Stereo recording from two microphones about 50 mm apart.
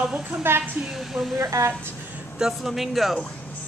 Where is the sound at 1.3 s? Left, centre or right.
Right.